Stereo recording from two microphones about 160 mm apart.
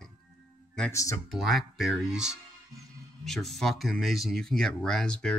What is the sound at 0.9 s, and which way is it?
Speech, 20° left (ahead or behind).